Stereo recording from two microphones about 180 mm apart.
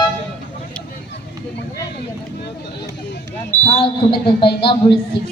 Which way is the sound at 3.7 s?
30° left (ahead or behind).